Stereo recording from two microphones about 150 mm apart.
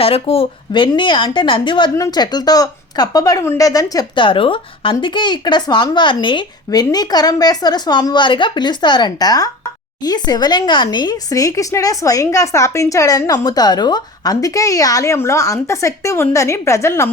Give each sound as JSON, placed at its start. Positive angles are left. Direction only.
{"t": 0.0, "sound": "a woman's voice", "side_deg": 40}